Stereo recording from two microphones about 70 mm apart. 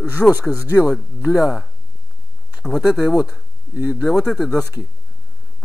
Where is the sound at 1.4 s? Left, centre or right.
Centre.